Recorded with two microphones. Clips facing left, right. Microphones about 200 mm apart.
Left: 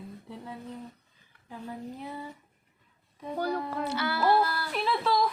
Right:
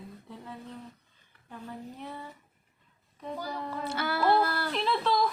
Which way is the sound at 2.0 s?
10° left (ahead or behind).